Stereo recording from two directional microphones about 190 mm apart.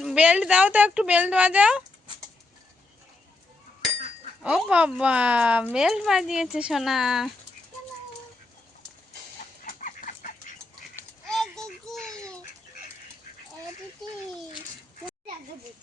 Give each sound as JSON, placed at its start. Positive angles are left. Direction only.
{"t": 0.0, "sound": "speech", "side_deg": -5}
{"t": 4.4, "sound": "speech", "side_deg": -5}
{"t": 9.6, "sound": "chicken", "side_deg": 45}
{"t": 11.3, "sound": "child singing", "side_deg": 0}